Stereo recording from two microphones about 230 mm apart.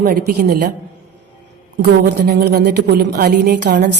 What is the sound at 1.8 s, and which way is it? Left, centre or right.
A woman's voice, right.